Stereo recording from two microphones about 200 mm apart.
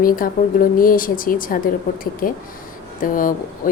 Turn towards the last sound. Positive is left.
turn(degrees=45)  # may be behind; listen again after turning